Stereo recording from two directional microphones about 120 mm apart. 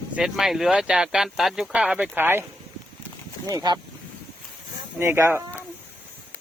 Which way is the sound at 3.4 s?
35° right (ahead or behind).